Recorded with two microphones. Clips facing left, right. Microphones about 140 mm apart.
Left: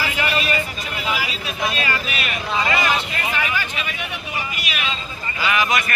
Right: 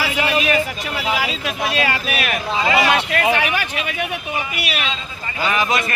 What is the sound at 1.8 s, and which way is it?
Speech, 70° right (ahead or behind).